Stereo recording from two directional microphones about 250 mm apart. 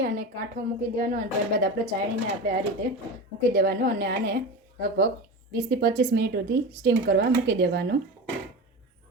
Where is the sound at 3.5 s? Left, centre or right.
Right.